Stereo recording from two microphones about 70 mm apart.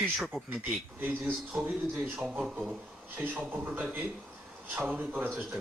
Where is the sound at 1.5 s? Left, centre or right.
Centre.